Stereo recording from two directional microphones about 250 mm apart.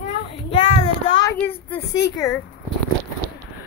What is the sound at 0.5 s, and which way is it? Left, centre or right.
Speech, left.